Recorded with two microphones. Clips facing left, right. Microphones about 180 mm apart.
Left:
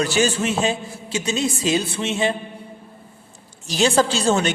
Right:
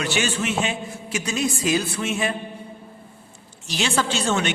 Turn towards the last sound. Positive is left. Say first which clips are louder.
# left 3 dB
turn(degrees=35)  # may be behind; listen again after turning